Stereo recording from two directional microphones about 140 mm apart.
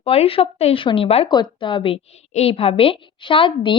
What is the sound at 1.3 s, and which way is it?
A woman's voice, 35° left (ahead or behind).